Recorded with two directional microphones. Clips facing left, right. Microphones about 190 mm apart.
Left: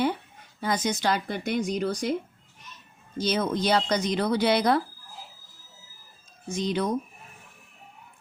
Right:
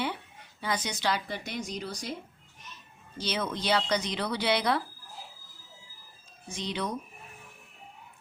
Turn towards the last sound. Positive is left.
turn(degrees=45)  # may be behind; listen again after turning